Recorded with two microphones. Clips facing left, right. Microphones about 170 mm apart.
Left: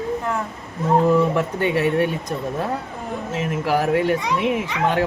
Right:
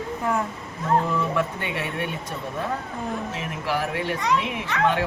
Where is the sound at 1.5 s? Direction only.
40° left (ahead or behind).